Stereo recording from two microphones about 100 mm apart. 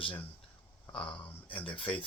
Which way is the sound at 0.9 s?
15° left (ahead or behind).